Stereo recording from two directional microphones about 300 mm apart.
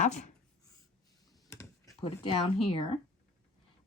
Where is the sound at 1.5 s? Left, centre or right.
Centre.